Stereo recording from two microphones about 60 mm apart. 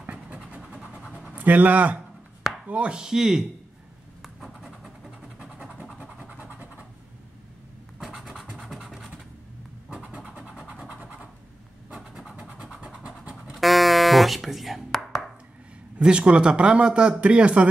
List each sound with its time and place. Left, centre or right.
0.0 s vehicle: right
1.3 s speech: right; by 3.4 s centre
4.2 s a sound: centre
5.9 s vehicle: right
8.0 s scratch: centre
9.8 s vehicle: centre
10.8 s a sound: centre
11.9 s vehicle: centre
13.5 s music: centre
16.0 s speech: centre